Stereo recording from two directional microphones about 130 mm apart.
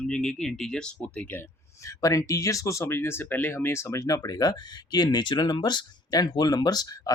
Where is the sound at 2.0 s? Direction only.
25° left (ahead or behind).